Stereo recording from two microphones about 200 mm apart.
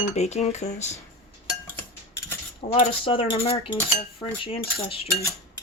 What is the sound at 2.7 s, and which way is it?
Speech, 30° left (ahead or behind).